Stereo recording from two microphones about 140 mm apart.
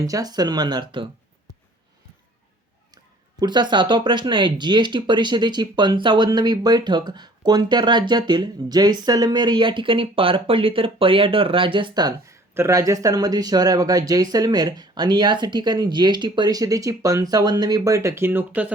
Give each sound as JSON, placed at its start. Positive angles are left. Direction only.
{"t": 0.0, "sound": "speech", "side_deg": -25}
{"t": 3.4, "sound": "speech", "side_deg": -30}